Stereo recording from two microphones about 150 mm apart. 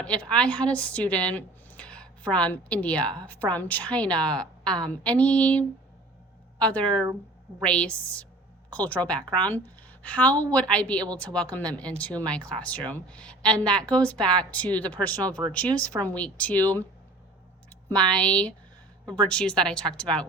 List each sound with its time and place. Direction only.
0.0 s a woman's voice: 5° left (ahead or behind)
17.8 s speech: 5° left (ahead or behind)
19.0 s a woman's voice: 25° right (ahead or behind)
19.3 s a woman's voice: 5° left (ahead or behind)